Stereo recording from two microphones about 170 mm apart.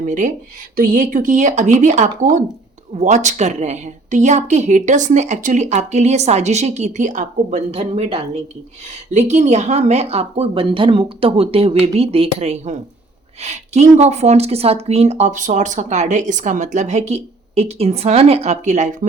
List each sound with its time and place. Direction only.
0.0 s a woman's voice: 50° right (ahead or behind)